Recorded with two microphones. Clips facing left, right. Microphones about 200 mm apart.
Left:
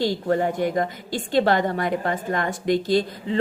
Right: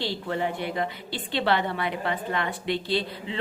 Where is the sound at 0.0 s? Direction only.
45° left (ahead or behind).